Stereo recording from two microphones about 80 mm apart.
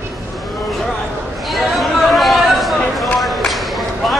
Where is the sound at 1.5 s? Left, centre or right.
Centre.